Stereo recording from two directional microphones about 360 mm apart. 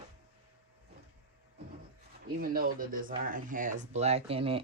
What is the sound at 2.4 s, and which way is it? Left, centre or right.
Speech, right.